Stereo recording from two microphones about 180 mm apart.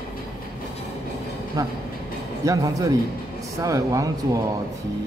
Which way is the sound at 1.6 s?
20° right (ahead or behind).